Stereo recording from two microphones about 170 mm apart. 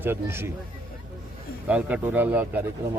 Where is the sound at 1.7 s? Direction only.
10° right (ahead or behind).